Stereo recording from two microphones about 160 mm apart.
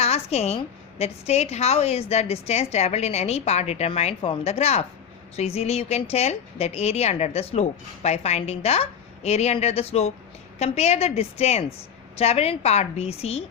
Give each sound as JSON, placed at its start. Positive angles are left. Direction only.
{"t": 0.0, "sound": "a woman's voice", "side_deg": 40}